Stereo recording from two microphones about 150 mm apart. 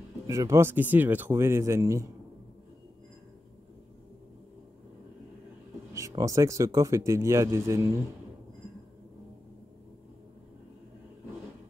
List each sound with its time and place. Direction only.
0.3 s speech: 20° right (ahead or behind)
5.9 s speech: 20° right (ahead or behind)